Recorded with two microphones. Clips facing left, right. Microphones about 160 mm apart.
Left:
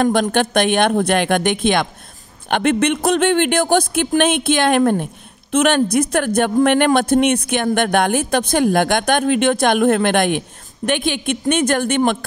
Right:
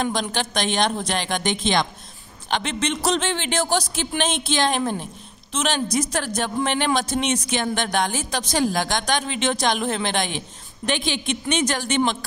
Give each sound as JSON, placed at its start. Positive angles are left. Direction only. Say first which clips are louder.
{"t": 0.0, "sound": "a man's voice", "louder": "left 9 dB", "side_deg": 55}